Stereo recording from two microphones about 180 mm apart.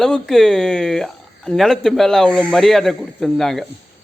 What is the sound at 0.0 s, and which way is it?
Speech, centre (ahead or behind).